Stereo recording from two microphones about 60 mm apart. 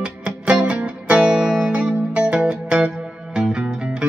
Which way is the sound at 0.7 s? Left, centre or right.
Right.